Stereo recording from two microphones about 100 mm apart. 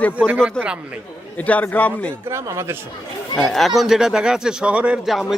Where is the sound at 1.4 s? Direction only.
15° left (ahead or behind).